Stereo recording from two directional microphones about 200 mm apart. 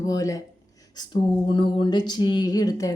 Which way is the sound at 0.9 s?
20° left (ahead or behind).